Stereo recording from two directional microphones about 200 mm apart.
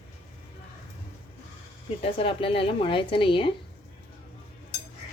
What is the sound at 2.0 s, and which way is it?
Speech, 30° left (ahead or behind).